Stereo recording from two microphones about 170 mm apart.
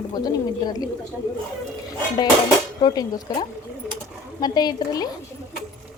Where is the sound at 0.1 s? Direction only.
25° left (ahead or behind).